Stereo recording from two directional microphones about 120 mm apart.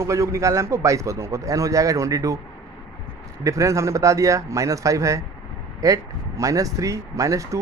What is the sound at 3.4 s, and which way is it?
Speech, 25° right (ahead or behind).